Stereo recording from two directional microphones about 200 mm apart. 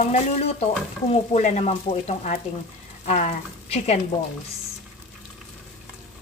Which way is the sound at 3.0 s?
35° left (ahead or behind).